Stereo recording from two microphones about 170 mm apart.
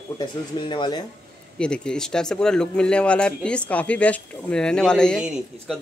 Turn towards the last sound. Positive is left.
turn(degrees=-5)  # may be behind; listen again after turning